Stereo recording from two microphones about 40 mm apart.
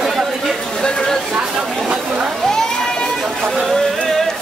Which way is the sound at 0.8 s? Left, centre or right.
Centre.